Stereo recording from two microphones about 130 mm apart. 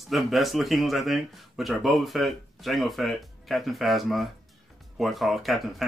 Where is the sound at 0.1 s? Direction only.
Centre (ahead or behind).